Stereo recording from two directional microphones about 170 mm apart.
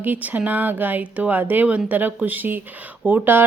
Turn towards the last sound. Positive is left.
turn(degrees=-10)  # may be behind; listen again after turning